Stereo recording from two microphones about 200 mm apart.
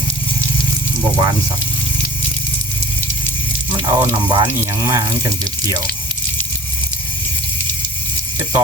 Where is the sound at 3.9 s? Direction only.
20° right (ahead or behind).